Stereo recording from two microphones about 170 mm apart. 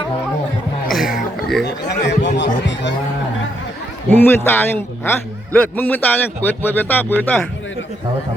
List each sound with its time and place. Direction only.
0.9 s a sound: 5° right (ahead or behind)
2.0 s speech: 90° left
4.1 s speech: 15° left (ahead or behind)